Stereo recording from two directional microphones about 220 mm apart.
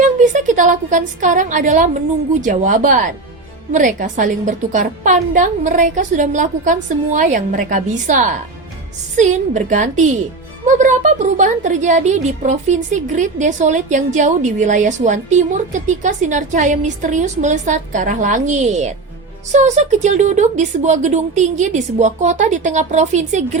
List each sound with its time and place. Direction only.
0.0 s a woman's voice: 35° right (ahead or behind)